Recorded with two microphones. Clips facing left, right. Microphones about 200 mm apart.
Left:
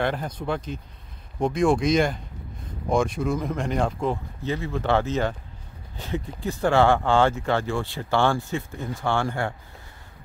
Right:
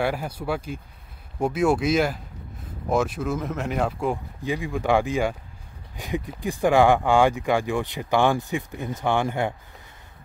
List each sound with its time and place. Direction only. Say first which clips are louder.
0.0 s speech: even; 10° right (ahead or behind)